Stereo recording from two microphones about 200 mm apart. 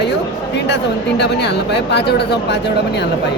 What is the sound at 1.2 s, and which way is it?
Speech, 60° left (ahead or behind).